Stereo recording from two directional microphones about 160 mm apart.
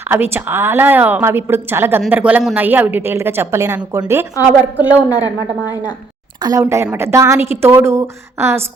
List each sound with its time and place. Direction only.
0.1 s a woman's voice: 15° right (ahead or behind)
6.4 s a woman's voice: 20° right (ahead or behind)